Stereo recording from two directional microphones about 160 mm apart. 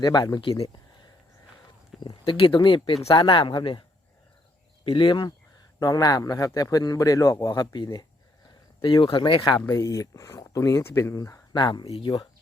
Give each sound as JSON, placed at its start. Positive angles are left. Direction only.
{"t": 0.0, "sound": "speech", "side_deg": 25}
{"t": 2.0, "sound": "speech", "side_deg": 35}
{"t": 4.9, "sound": "speech", "side_deg": 30}